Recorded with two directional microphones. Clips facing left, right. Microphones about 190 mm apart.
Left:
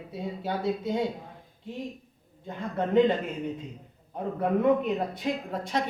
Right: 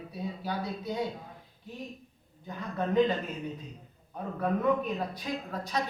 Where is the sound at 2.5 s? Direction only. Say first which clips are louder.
Left 4 dB; 25° left (ahead or behind).